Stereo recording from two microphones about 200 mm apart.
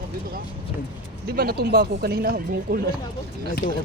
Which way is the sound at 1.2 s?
50° right (ahead or behind).